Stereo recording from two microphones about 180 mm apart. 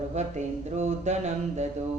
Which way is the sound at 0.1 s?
40° right (ahead or behind).